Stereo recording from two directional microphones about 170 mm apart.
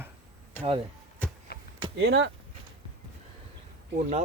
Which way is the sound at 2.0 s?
80° right.